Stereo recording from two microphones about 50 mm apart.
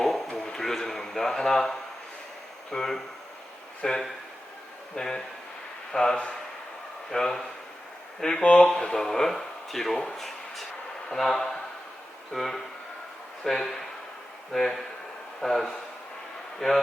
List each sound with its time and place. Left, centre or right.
0.0 s a sound: centre
2.6 s speech: centre
8.4 s speech: left
8.7 s speech: centre
10.2 s a sound: centre
11.1 s speech: centre